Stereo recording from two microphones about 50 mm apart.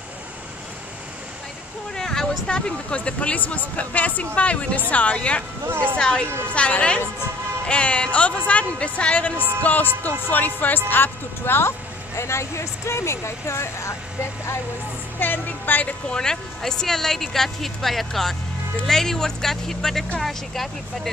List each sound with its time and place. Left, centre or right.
2.0 s a sound: centre
2.5 s speech: left
5.7 s speech: right
5.9 s speech: centre
6.2 s a woman's voice: right
6.5 s a woman's voice: left
12.2 s speech: left
15.1 s a woman's voice: left
16.1 s speech: centre